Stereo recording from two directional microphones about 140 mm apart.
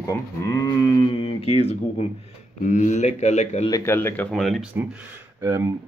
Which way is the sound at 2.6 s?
60° left (ahead or behind).